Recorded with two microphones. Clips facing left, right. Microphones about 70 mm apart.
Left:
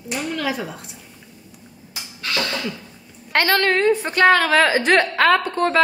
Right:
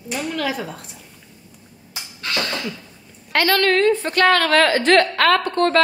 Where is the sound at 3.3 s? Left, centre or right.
Left.